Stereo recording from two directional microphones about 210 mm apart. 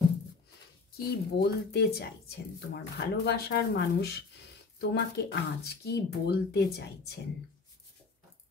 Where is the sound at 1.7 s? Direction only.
50° left (ahead or behind).